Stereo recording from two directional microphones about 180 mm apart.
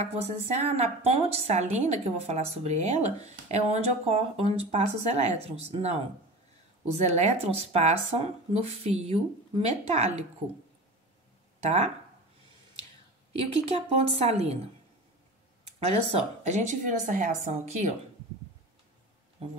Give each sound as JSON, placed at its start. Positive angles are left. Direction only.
{"t": 0.1, "sound": "a woman's voice", "side_deg": -35}
{"t": 7.0, "sound": "a woman's voice", "side_deg": -40}
{"t": 11.6, "sound": "speech", "side_deg": -35}
{"t": 13.3, "sound": "a woman's voice", "side_deg": -35}
{"t": 15.6, "sound": "a woman's voice", "side_deg": -35}